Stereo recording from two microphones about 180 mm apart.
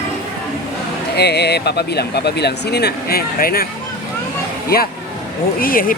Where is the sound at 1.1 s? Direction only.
65° left (ahead or behind).